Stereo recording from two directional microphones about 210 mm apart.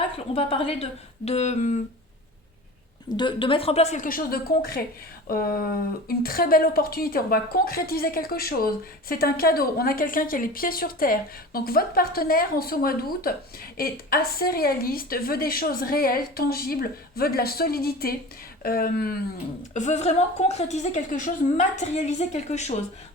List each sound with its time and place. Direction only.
0.3 s a woman's voice: 25° left (ahead or behind)
3.1 s a woman's voice: 20° left (ahead or behind); by 19.1 s 45° left (ahead or behind)
19.7 s a woman's voice: 35° left (ahead or behind)